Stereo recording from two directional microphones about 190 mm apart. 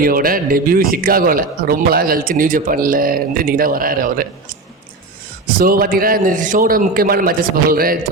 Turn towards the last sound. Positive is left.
turn(degrees=-50)  # may be behind; listen again after turning